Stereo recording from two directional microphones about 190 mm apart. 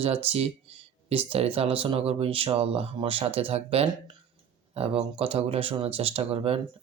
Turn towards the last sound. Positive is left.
turn(degrees=-30)  # may be behind; listen again after turning